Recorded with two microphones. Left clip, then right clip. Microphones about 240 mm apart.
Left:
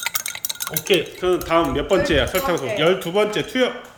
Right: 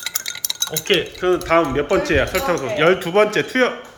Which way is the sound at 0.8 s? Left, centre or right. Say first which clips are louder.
Even; centre.